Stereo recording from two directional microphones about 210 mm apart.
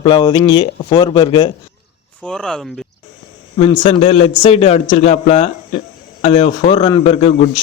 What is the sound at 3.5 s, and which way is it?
A man's voice, 30° left (ahead or behind).